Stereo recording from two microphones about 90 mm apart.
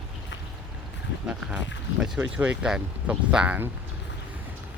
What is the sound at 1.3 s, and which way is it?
Speech, 10° right (ahead or behind).